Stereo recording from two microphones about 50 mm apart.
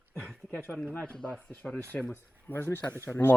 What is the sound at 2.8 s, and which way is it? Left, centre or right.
Speech, left.